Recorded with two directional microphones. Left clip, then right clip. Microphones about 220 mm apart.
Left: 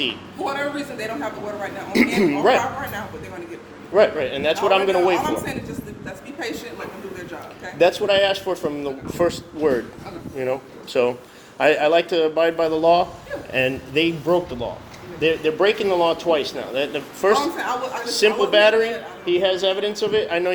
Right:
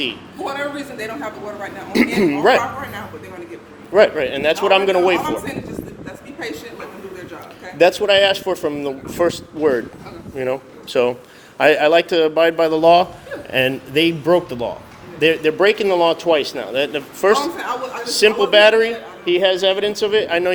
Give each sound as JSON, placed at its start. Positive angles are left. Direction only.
{"t": 0.0, "sound": "a man's voice", "side_deg": -15}
{"t": 2.1, "sound": "a man's voice", "side_deg": -20}
{"t": 3.9, "sound": "speech", "side_deg": -25}
{"t": 7.8, "sound": "speech", "side_deg": -30}
{"t": 17.6, "sound": "a man's voice", "side_deg": 0}
{"t": 18.1, "sound": "speech", "side_deg": -25}